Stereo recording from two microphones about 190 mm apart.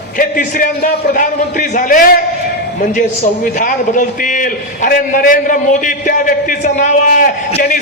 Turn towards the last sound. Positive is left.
turn(degrees=45)  # may be behind; listen again after turning